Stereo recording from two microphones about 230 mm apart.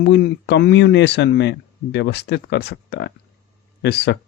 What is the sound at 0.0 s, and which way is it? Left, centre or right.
Speech, left.